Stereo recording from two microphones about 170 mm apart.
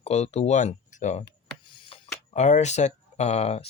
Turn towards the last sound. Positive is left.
turn(degrees=40)  # may be behind; listen again after turning